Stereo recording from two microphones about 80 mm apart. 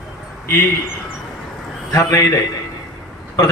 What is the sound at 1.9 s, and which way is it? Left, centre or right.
Speech, left.